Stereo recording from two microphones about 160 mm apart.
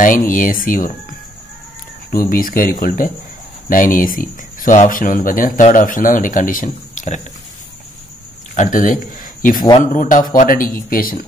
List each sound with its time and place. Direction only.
0.0 s speech: 55° left (ahead or behind)
2.0 s speech: 60° left (ahead or behind)
8.5 s a man's voice: 55° left (ahead or behind)